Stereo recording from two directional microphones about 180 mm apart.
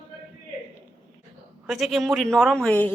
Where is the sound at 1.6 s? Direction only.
Centre (ahead or behind).